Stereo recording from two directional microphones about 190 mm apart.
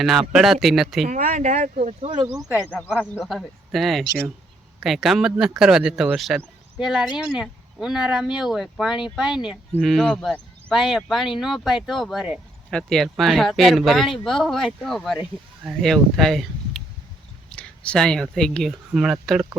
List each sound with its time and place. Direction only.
0.0 s speech: centre (ahead or behind)
1.0 s speech: 45° right (ahead or behind)
2.1 s speech: 15° right (ahead or behind)
2.6 s speech: 10° left (ahead or behind)